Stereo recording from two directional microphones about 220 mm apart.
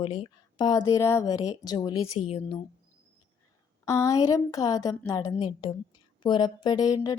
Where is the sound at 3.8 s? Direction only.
15° left (ahead or behind).